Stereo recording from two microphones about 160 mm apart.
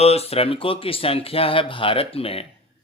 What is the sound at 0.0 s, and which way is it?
Speech, 40° left (ahead or behind).